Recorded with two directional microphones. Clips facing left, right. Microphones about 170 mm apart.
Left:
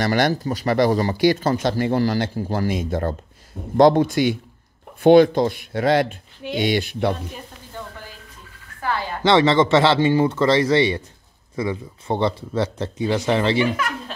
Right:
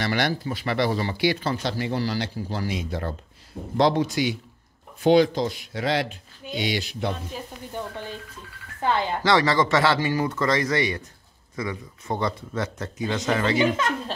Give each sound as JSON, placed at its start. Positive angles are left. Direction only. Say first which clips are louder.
{"t": 0.0, "sound": "speech", "louder": "left 5 dB", "side_deg": 45}
{"t": 8.8, "sound": "a woman's voice", "louder": "right 2 dB", "side_deg": -20}
{"t": 9.2, "sound": "speech", "louder": "left 7 dB", "side_deg": 25}
{"t": 13.7, "sound": "a woman's voice", "louder": "right 1 dB", "side_deg": -25}